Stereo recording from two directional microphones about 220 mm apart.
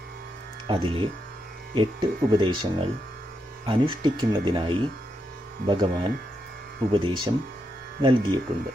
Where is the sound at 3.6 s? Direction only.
20° right (ahead or behind).